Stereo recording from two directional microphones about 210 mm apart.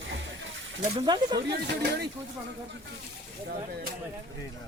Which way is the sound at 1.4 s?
50° right (ahead or behind).